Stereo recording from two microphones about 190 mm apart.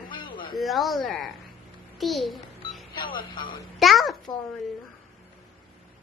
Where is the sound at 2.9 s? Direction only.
25° left (ahead or behind).